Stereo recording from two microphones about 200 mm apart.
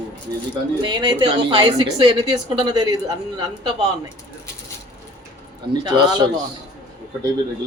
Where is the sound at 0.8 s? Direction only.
20° right (ahead or behind).